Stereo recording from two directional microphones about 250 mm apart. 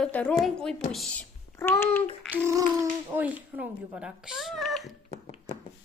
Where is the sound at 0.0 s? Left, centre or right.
Centre.